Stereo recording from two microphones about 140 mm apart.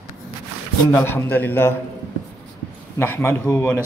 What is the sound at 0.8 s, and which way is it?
Speech, 20° left (ahead or behind).